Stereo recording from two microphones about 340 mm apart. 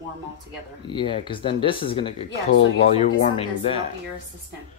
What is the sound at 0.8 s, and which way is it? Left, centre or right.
Speech, centre.